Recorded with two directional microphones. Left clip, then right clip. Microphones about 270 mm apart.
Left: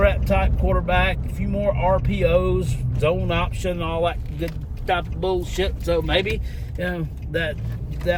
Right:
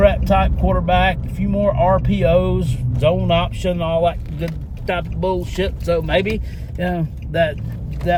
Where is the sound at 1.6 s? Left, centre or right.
Centre.